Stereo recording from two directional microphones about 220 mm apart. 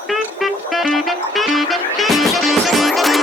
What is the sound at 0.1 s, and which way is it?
Music, centre (ahead or behind).